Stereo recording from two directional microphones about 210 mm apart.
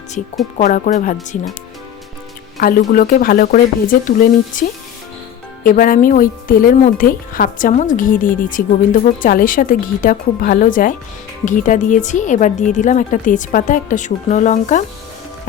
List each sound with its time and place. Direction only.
0.6 s speech: 35° left (ahead or behind)
2.6 s speech: 45° left (ahead or behind)
5.6 s speech: 40° left (ahead or behind)